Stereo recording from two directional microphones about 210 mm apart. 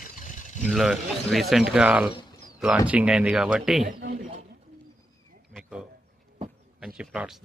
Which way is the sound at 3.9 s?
45° right (ahead or behind).